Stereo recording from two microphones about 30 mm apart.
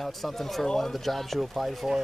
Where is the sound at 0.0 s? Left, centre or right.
Centre.